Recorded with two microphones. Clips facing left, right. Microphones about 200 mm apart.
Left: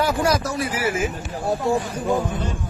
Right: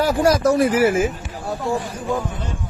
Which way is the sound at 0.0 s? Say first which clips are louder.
Right 4 dB; 45° right (ahead or behind).